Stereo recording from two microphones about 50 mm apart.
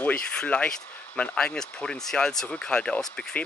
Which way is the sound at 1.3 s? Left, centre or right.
Centre.